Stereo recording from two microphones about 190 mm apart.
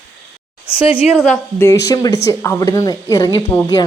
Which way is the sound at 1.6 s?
15° left (ahead or behind).